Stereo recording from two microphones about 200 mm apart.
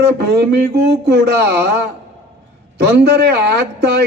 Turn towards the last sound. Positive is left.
turn(degrees=-55)  # may be behind; listen again after turning